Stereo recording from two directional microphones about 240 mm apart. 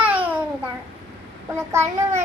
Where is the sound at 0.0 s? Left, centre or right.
Centre.